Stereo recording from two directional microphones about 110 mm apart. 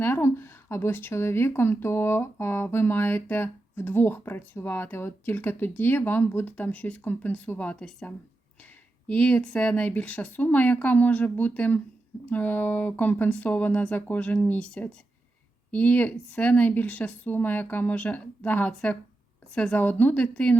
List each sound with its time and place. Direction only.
0.0 s a woman's voice: 20° left (ahead or behind)